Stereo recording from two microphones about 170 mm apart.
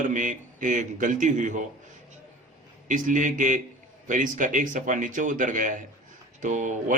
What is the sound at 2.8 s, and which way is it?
A man's voice, 50° right (ahead or behind).